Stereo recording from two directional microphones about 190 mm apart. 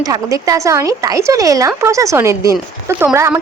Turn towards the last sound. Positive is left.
turn(degrees=-10)  # may be behind; listen again after turning